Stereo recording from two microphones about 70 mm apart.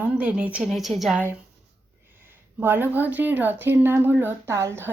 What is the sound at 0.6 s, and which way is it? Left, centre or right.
Speech, centre.